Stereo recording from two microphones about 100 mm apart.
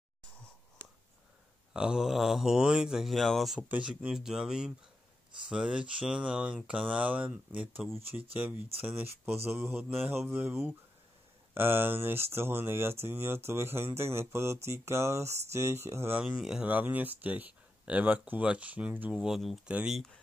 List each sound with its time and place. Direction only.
1.7 s speech: 5° right (ahead or behind)
3.5 s speech: 15° right (ahead or behind)
16.3 s speech: 5° right (ahead or behind)
16.6 s speech: 15° right (ahead or behind)
19.1 s speech: 5° right (ahead or behind)